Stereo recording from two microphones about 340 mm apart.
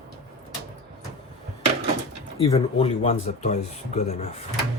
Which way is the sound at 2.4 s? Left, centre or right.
Centre.